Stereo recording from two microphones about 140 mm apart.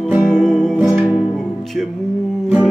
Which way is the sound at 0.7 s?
10° right (ahead or behind).